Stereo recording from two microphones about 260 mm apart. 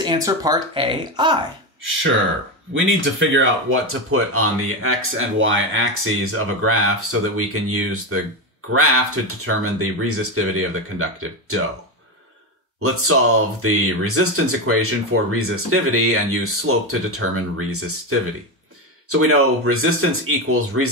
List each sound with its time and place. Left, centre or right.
0.0 s speech: centre
2.7 s speech: right
12.8 s speech: right
19.0 s speech: right